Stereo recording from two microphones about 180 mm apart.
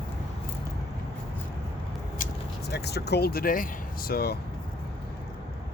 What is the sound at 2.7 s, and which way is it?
Speech, 65° left (ahead or behind).